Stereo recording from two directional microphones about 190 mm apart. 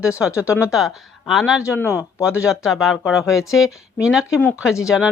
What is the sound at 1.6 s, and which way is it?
Speech, 15° left (ahead or behind).